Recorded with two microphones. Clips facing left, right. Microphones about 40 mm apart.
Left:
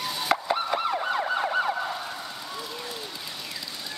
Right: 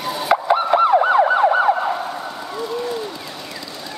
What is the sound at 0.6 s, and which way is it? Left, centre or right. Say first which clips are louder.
Emergency vehicle: right 12 dB; right.